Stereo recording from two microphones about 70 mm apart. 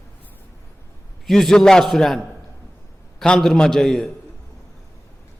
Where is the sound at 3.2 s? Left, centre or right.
Centre.